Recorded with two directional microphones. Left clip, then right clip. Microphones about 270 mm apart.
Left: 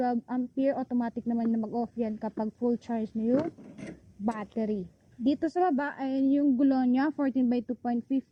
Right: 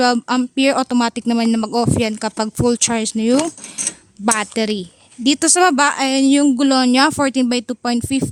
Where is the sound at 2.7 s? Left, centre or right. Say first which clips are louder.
Right 15 dB; right.